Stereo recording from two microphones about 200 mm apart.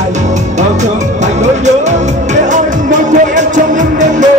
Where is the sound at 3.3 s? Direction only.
40° right (ahead or behind).